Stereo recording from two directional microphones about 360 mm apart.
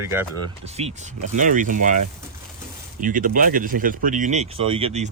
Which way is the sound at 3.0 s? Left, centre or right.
Right.